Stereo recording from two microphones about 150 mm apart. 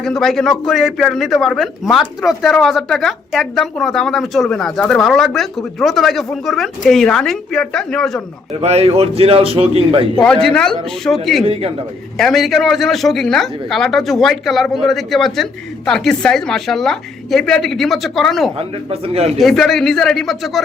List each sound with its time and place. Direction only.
0.0 s a man's voice: 5° left (ahead or behind)
8.6 s a man's voice: 45° right (ahead or behind)
10.2 s a man's voice: 5° left (ahead or behind)
11.4 s a man's voice: 40° right (ahead or behind)
12.1 s a man's voice: centre (ahead or behind)
18.5 s speech: 40° right (ahead or behind)
19.4 s a man's voice: centre (ahead or behind)